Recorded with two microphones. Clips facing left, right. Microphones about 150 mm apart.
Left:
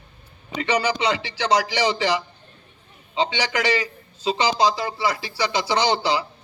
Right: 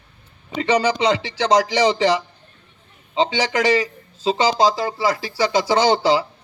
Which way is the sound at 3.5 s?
45° right (ahead or behind).